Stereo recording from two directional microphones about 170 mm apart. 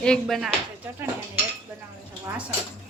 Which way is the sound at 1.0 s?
15° right (ahead or behind).